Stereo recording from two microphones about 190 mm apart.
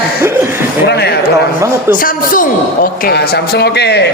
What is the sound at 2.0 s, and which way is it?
A man's voice, 45° left (ahead or behind).